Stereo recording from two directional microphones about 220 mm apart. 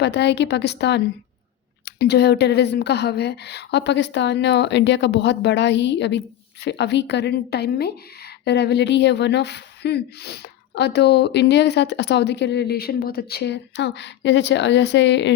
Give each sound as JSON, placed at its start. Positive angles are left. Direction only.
{"t": 0.0, "sound": "speech", "side_deg": 50}